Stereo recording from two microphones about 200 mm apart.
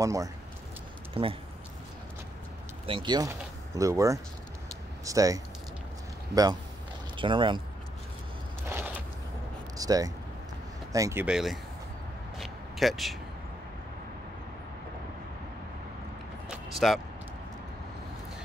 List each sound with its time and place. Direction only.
0.0 s speech: 15° right (ahead or behind)
1.2 s speech: 30° right (ahead or behind)
2.9 s speech: 20° right (ahead or behind)
7.2 s speech: 25° right (ahead or behind)
8.6 s a sound: 10° right (ahead or behind)
9.8 s speech: 20° right (ahead or behind)
11.2 s speech: centre (ahead or behind)
12.4 s a sound: centre (ahead or behind)
16.7 s speech: centre (ahead or behind)